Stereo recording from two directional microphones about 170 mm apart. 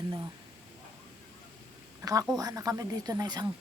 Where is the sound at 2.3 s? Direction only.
20° right (ahead or behind).